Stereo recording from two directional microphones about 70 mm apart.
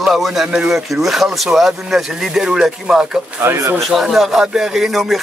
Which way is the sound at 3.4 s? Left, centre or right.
Right.